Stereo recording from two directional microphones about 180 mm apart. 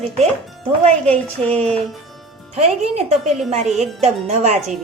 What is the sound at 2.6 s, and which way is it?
Speech, 35° right (ahead or behind).